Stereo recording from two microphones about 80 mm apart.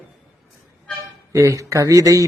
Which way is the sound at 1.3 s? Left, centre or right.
Right.